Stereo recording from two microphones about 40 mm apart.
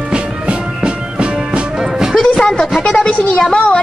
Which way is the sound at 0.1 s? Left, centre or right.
Right.